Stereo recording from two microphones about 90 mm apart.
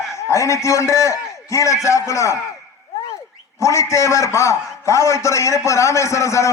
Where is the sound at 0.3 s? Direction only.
35° left (ahead or behind).